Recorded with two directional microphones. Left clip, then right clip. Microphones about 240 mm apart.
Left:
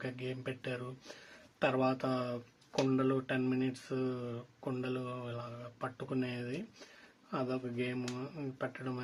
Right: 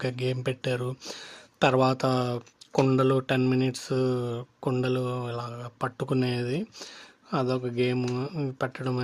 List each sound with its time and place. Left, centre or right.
0.0 s speech: right